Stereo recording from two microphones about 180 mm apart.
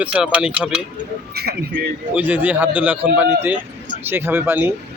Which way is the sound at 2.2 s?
10° right (ahead or behind).